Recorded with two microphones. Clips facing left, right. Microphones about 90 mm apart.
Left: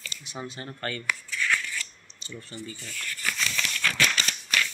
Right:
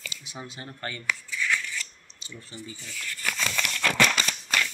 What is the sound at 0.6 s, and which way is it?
Speech, 10° right (ahead or behind).